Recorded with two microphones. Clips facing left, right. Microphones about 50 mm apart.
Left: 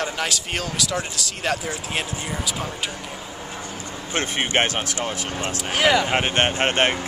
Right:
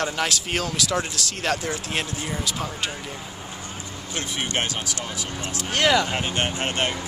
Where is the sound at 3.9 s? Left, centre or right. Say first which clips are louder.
Left 6 dB; left.